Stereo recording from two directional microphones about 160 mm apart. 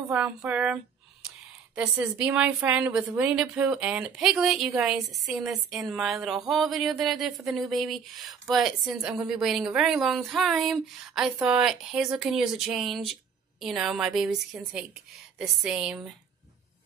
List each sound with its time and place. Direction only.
0.1 s speech: 10° right (ahead or behind)
1.2 s a sound: 5° right (ahead or behind)
1.8 s a woman's voice: 5° right (ahead or behind)